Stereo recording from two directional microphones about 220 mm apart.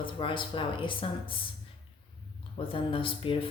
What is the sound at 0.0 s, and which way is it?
Speech, 25° left (ahead or behind).